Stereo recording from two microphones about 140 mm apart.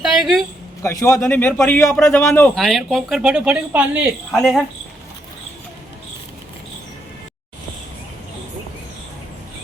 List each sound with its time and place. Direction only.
0.0 s a sound: centre (ahead or behind)
0.8 s a man's voice: 20° left (ahead or behind)
2.6 s speech: centre (ahead or behind)
4.3 s speech: centre (ahead or behind)